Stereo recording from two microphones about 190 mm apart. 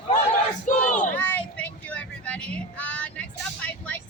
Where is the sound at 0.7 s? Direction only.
40° left (ahead or behind).